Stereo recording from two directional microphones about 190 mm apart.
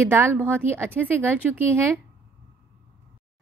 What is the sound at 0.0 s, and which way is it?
A woman's voice, 10° right (ahead or behind).